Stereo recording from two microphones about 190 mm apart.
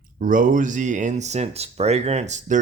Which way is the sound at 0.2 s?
45° right (ahead or behind).